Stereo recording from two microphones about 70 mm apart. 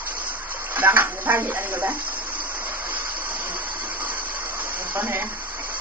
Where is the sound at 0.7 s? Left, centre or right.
Right.